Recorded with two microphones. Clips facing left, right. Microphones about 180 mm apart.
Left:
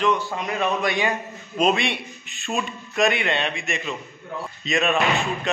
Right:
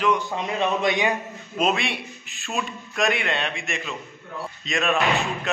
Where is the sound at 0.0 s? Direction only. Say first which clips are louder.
Left 1 dB; 10° right (ahead or behind).